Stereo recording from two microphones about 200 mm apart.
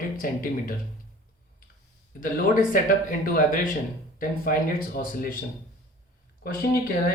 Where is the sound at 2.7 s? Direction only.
45° left (ahead or behind).